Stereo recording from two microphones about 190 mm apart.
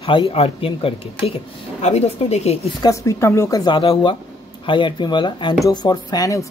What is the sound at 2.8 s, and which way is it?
Speech, 15° left (ahead or behind).